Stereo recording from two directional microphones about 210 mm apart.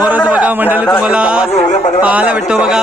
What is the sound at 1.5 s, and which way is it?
Speech, 30° left (ahead or behind).